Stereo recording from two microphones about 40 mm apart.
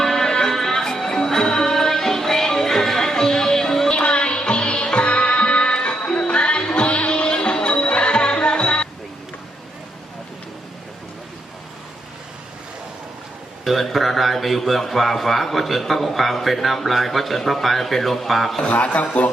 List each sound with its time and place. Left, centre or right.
0.0 s music: centre
3.9 s music: left
13.7 s speech: centre
18.6 s a man's voice: left